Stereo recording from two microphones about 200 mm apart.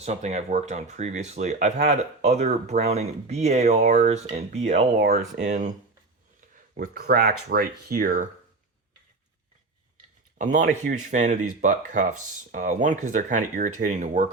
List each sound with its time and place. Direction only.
0.0 s speech: 35° right (ahead or behind)
4.9 s speech: 50° right (ahead or behind)
6.7 s speech: 45° right (ahead or behind)
10.3 s speech: 40° right (ahead or behind)